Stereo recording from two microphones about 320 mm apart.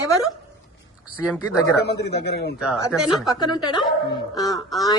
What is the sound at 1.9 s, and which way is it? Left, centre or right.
Speech, left.